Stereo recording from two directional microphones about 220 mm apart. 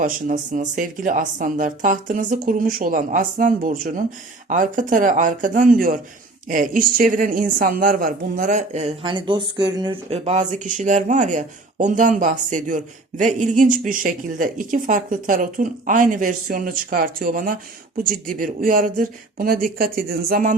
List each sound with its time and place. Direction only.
0.0 s a woman's voice: 35° right (ahead or behind)